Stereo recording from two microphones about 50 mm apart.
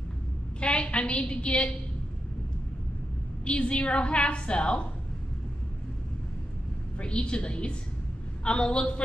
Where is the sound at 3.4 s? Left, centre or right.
Left.